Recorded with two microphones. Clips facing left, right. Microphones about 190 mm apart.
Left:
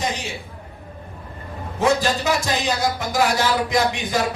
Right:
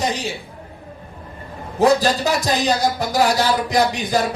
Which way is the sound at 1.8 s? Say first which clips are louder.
Right 4 dB; 35° right (ahead or behind).